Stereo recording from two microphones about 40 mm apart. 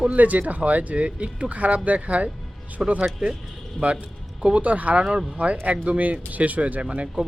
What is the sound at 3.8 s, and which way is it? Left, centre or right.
Speech, right.